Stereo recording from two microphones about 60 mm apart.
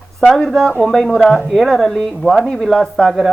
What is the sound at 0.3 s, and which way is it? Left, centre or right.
Speech, centre.